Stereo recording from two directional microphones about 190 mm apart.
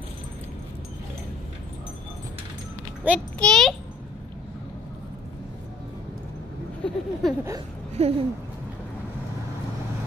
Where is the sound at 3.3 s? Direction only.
Centre (ahead or behind).